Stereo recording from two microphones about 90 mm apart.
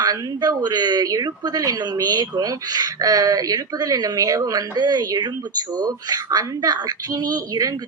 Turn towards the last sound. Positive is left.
turn(degrees=-45)  # may be behind; listen again after turning